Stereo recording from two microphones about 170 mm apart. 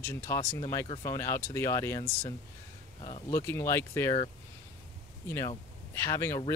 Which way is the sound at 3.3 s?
15° left (ahead or behind).